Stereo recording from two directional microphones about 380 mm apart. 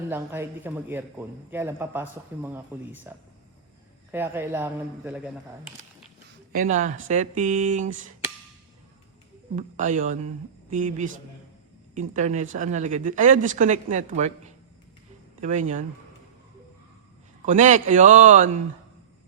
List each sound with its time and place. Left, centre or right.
0.1 s speech: centre
6.5 s speech: centre
9.6 s speech: centre
17.4 s speech: centre